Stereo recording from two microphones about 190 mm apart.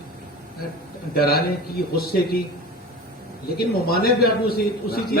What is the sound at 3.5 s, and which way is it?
A man's voice, 55° left (ahead or behind).